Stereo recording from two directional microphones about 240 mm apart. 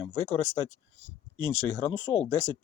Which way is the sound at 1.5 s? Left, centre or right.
Left.